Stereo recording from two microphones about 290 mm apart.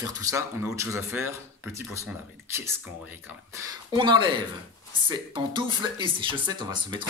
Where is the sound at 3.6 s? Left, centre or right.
Centre.